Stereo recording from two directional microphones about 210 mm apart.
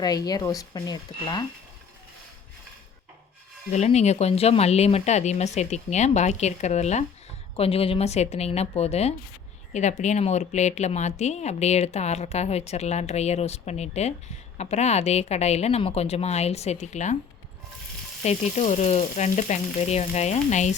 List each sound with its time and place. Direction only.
0.0 s speech: 20° left (ahead or behind)
3.7 s speech: 30° left (ahead or behind)
18.2 s speech: 30° left (ahead or behind)